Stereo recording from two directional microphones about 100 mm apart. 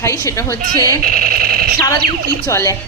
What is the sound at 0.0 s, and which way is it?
Speech, 30° left (ahead or behind).